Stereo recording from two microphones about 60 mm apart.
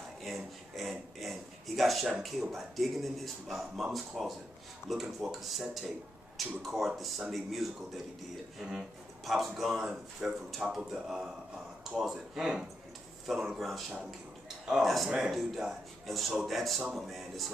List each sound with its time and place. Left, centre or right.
0.2 s a man's voice: centre
9.2 s a man's voice: centre
15.0 s speech: centre
15.3 s a man's voice: centre